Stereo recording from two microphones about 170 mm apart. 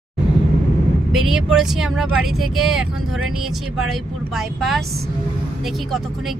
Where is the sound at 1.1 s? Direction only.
Centre (ahead or behind).